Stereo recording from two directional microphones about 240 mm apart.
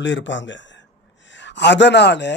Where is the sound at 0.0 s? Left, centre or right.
Left.